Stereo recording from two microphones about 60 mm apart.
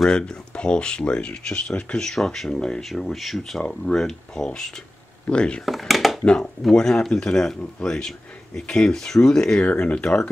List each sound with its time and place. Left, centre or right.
0.0 s speech: centre
5.7 s a sound: centre
6.6 s speech: centre